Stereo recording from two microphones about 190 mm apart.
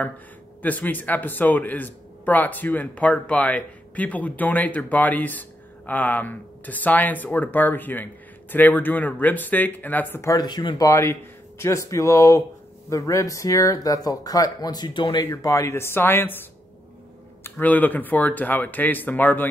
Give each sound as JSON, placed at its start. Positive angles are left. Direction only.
{"t": 0.6, "sound": "a man's voice", "side_deg": 10}
{"t": 17.4, "sound": "a man's voice", "side_deg": 10}